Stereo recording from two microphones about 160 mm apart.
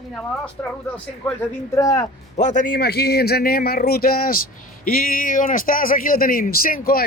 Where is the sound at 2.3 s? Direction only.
50° left (ahead or behind).